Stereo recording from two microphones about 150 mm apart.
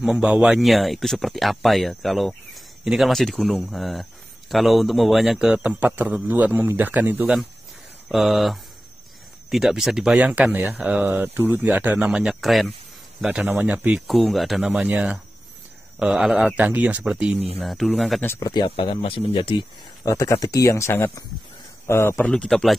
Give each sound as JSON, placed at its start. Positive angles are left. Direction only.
{"t": 0.0, "sound": "speech", "side_deg": -5}
{"t": 8.1, "sound": "speech", "side_deg": 0}
{"t": 18.4, "sound": "speech", "side_deg": 30}
{"t": 20.1, "sound": "a man's voice", "side_deg": 25}